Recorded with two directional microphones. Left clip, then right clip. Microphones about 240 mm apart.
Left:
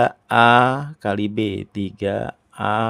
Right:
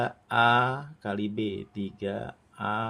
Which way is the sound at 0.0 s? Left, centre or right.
Left.